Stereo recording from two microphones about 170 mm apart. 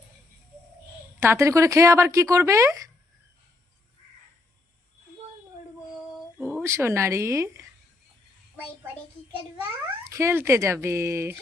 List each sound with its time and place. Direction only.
1.2 s speech: 15° right (ahead or behind)
6.4 s speech: 15° right (ahead or behind)
9.6 s speech: 20° right (ahead or behind)